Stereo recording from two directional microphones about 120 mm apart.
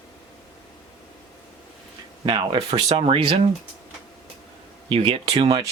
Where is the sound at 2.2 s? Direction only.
35° right (ahead or behind); by 3.5 s 55° right (ahead or behind).